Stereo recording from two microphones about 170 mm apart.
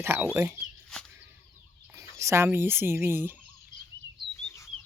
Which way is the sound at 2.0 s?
15° right (ahead or behind).